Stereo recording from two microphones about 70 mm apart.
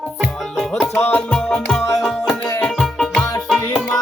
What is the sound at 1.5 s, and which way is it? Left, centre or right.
Music, centre.